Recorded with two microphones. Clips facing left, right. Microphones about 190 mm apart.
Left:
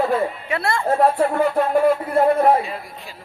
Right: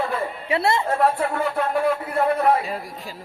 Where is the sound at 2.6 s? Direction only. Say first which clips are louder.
Right 1 dB; 40° right (ahead or behind).